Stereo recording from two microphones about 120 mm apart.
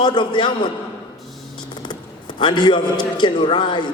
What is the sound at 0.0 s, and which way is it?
Speech, 40° left (ahead or behind).